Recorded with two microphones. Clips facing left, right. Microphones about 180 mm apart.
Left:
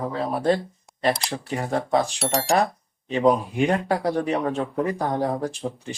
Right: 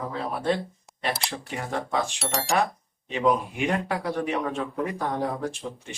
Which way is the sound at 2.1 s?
Centre (ahead or behind).